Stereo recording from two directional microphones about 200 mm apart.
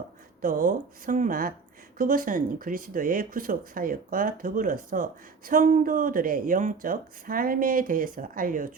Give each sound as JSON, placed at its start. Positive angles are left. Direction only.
{"t": 0.4, "sound": "speech", "side_deg": -45}